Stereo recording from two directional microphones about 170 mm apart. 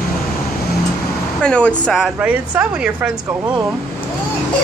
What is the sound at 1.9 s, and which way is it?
Speech, 5° right (ahead or behind).